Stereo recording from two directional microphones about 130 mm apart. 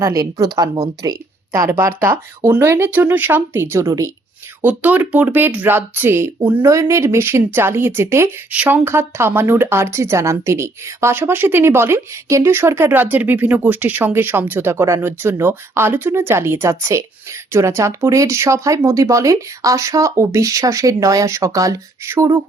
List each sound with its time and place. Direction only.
0.0 s speech: 25° right (ahead or behind)
4.6 s speech: 10° right (ahead or behind)